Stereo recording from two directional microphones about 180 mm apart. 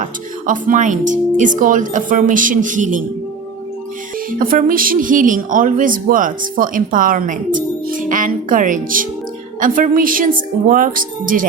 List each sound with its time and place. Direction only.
0.0 s speech: 45° right (ahead or behind)
4.3 s speech: 50° right (ahead or behind)